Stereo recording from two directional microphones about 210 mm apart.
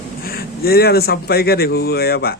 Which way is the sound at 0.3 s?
45° left (ahead or behind).